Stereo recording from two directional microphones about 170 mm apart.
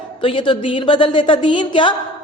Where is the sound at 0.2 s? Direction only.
30° left (ahead or behind).